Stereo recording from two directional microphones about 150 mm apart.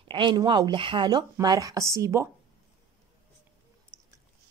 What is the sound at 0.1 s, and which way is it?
Speech, 35° right (ahead or behind).